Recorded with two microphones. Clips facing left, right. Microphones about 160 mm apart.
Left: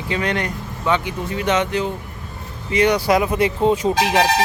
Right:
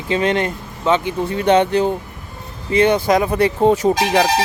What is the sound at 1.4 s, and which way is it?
Speech, 35° right (ahead or behind).